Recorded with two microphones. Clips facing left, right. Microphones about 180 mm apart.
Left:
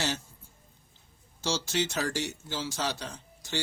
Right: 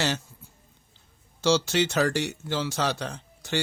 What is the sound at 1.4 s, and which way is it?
Speech, 70° right (ahead or behind).